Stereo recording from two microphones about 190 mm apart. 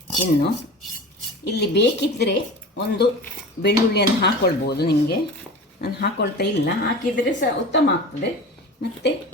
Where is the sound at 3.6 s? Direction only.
65° left (ahead or behind).